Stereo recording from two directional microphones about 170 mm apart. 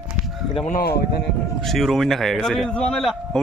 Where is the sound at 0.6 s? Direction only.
60° left (ahead or behind).